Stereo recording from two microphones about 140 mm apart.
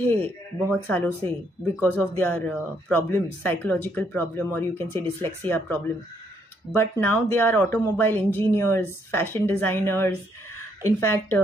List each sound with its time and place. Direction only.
0.0 s speech: 15° left (ahead or behind)